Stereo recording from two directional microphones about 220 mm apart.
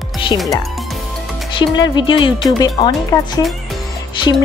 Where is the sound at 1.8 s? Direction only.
20° left (ahead or behind).